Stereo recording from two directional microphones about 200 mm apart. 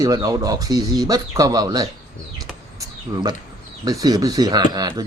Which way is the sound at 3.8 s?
20° right (ahead or behind).